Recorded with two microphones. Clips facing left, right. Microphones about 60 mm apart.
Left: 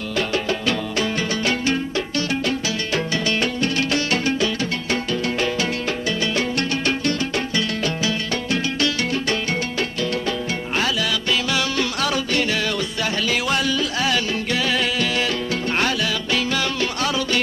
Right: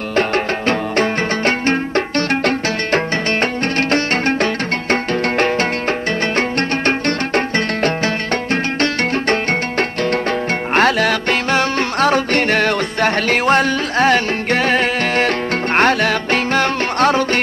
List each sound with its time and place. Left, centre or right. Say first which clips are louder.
0.1 s music: right 6 dB; right